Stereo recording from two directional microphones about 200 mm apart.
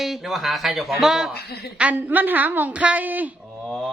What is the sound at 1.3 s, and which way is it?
Speech, 50° left (ahead or behind).